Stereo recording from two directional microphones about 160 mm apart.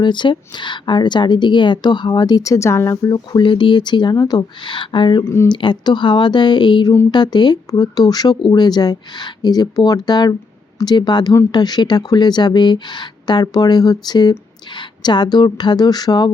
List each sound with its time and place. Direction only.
0.0 s a woman's voice: 30° left (ahead or behind)
5.2 s speech: 15° left (ahead or behind)
5.5 s a woman's voice: 30° left (ahead or behind)